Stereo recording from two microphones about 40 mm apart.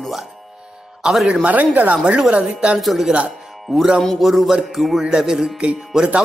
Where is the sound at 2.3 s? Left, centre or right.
Right.